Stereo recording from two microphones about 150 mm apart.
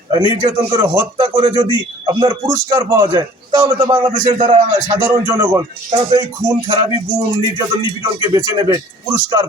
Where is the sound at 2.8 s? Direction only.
20° right (ahead or behind).